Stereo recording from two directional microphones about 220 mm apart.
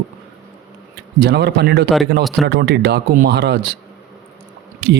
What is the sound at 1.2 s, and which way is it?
Speech, 50° right (ahead or behind).